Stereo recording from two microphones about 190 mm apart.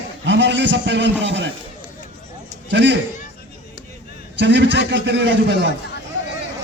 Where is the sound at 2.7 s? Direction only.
65° right (ahead or behind).